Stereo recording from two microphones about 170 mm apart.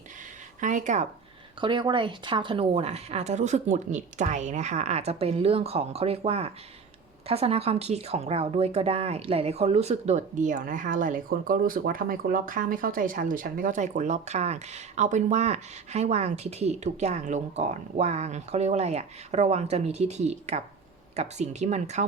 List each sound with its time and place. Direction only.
0.6 s speech: 45° right (ahead or behind)
1.6 s speech: 30° right (ahead or behind)